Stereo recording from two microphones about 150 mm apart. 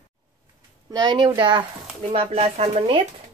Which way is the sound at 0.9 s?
30° right (ahead or behind).